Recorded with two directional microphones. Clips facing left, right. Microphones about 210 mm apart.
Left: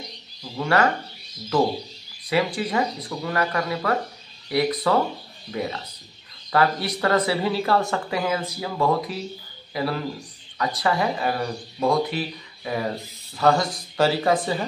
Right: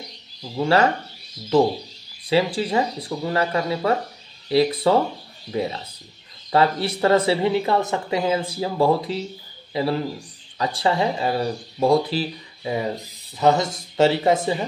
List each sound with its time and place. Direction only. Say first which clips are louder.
0.6 s speech: right 3 dB; 25° right (ahead or behind)
2.2 s speech: right 3 dB; 25° right (ahead or behind)